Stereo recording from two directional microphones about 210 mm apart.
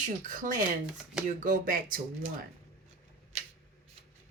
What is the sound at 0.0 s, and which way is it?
Speech, 40° right (ahead or behind).